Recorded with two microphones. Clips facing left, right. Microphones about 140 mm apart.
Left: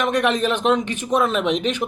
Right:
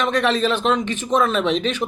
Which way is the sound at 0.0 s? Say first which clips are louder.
Even; 15° left (ahead or behind).